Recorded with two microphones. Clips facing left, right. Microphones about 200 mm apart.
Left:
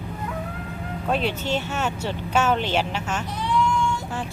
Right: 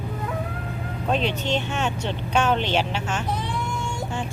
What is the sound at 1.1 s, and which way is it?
Speech, 5° left (ahead or behind).